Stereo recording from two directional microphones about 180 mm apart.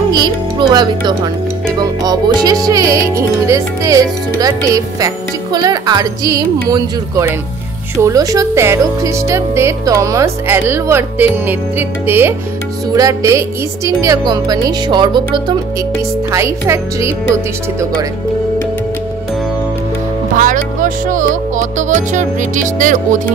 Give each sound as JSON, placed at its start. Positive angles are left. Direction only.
{"t": 0.1, "sound": "speech", "side_deg": -25}
{"t": 1.8, "sound": "music", "side_deg": -20}
{"t": 8.0, "sound": "speech", "side_deg": -20}
{"t": 12.9, "sound": "music", "side_deg": -20}
{"t": 16.3, "sound": "speech", "side_deg": -15}
{"t": 20.3, "sound": "music", "side_deg": -45}
{"t": 21.5, "sound": "speech", "side_deg": -45}